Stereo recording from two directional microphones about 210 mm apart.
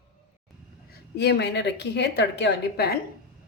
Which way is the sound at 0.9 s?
50° left (ahead or behind).